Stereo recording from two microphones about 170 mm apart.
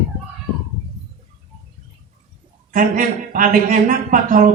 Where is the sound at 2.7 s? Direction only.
55° right (ahead or behind).